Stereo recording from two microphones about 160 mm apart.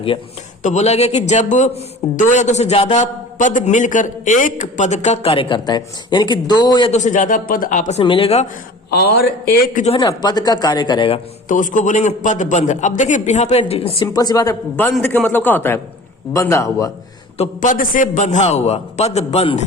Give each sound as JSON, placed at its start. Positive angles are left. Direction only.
{"t": 0.6, "sound": "a man's voice", "side_deg": 45}
{"t": 6.9, "sound": "a man's voice", "side_deg": 50}
{"t": 8.0, "sound": "speech", "side_deg": 35}
{"t": 8.9, "sound": "a man's voice", "side_deg": 90}
{"t": 10.0, "sound": "speech", "side_deg": 25}
{"t": 11.4, "sound": "a man's voice", "side_deg": 55}
{"t": 14.1, "sound": "speech", "side_deg": 25}
{"t": 15.0, "sound": "a man's voice", "side_deg": 10}
{"t": 17.6, "sound": "a man's voice", "side_deg": 55}